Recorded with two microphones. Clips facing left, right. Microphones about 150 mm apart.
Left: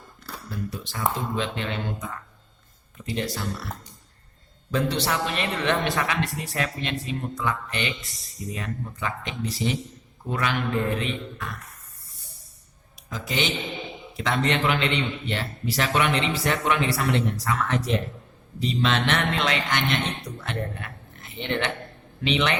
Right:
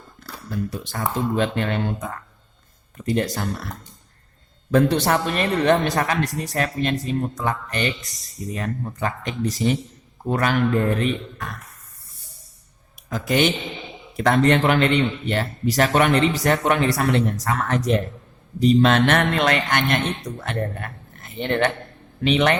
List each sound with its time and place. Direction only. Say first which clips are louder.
0.7 s a man's voice: right 2 dB; 45° right (ahead or behind)
4.7 s a man's voice: right 7 dB; 50° right (ahead or behind)
13.1 s a man's voice: right 8 dB; 50° right (ahead or behind)